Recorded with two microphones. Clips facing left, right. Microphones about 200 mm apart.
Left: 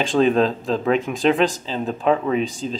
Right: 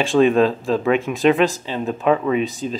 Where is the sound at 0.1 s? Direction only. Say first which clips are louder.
Right 3 dB; 25° left (ahead or behind).